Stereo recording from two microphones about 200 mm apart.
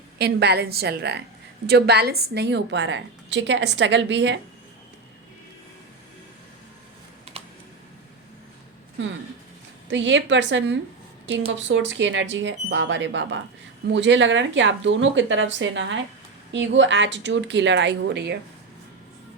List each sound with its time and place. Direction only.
0.2 s a woman's voice: 55° right (ahead or behind)
9.9 s a woman's voice: 65° right (ahead or behind)